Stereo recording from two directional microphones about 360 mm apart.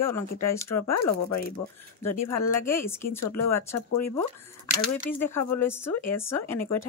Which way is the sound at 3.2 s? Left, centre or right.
Left.